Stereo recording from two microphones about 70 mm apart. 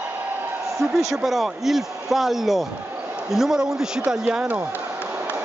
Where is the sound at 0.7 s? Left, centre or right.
Centre.